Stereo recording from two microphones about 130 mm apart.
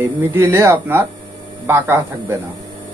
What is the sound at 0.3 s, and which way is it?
A man's voice, 20° right (ahead or behind).